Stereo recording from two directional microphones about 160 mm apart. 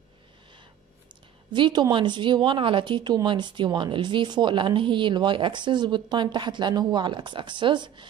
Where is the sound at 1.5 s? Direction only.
25° right (ahead or behind).